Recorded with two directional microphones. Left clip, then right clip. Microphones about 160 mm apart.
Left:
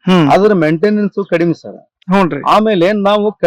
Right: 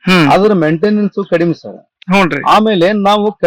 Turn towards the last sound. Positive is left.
turn(degrees=0)  # may be behind; listen again after turning